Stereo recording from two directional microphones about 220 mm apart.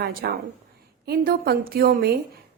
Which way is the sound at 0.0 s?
45° right (ahead or behind).